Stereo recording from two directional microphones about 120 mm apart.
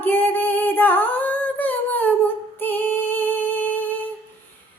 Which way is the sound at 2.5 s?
15° left (ahead or behind).